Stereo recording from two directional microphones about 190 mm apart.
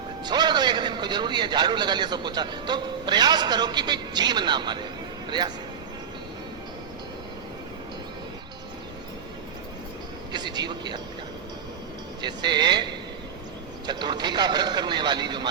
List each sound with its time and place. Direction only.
0.3 s a man's voice: 25° right (ahead or behind)
10.3 s speech: 20° right (ahead or behind)
12.2 s a man's voice: 25° right (ahead or behind)